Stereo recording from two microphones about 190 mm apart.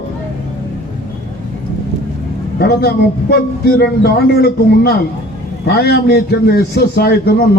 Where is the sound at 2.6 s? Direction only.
55° left (ahead or behind).